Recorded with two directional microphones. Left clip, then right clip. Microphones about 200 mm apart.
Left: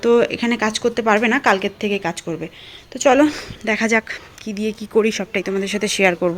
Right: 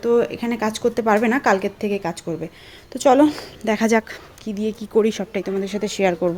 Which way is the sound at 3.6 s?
15° right (ahead or behind).